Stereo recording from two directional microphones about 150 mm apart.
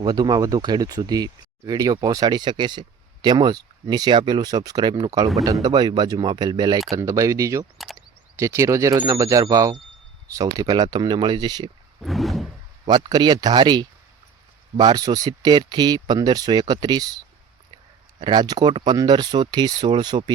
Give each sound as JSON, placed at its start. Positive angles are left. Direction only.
{"t": 0.0, "sound": "speech", "side_deg": -25}
{"t": 12.0, "sound": "a sound", "side_deg": 0}
{"t": 12.8, "sound": "speech", "side_deg": -30}
{"t": 18.2, "sound": "speech", "side_deg": -30}